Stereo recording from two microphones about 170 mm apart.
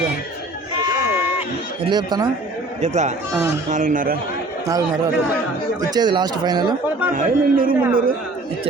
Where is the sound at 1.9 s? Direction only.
25° right (ahead or behind).